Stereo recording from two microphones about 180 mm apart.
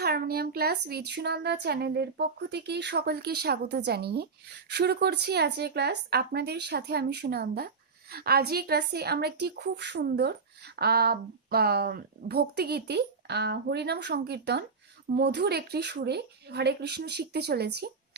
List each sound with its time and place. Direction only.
0.0 s speech: 60° right (ahead or behind)